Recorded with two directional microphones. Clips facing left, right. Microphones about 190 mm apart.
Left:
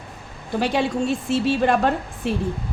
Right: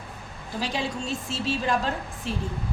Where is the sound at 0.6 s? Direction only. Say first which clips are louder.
Left 8 dB; 60° left (ahead or behind).